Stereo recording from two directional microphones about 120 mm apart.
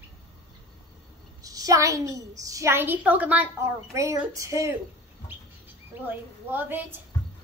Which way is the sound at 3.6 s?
25° right (ahead or behind).